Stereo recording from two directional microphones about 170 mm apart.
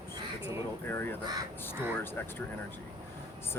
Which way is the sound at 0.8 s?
15° left (ahead or behind).